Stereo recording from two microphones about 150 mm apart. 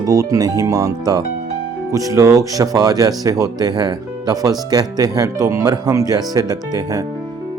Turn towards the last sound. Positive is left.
turn(degrees=-25)  # may be behind; listen again after turning